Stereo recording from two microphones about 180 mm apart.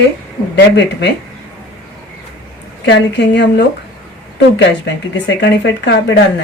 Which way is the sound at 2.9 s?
80° left.